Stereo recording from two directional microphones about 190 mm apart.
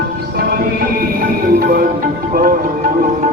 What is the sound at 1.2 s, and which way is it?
Music, 50° right (ahead or behind).